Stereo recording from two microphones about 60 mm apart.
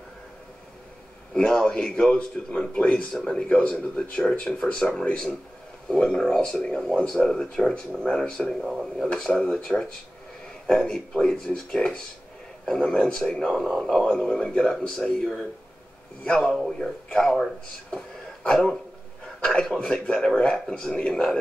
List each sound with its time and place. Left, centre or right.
1.3 s a man's voice: centre
3.4 s a man's voice: centre
5.9 s a man's voice: centre
16.3 s speech: centre
17.9 s a sound: centre
19.4 s a man's voice: centre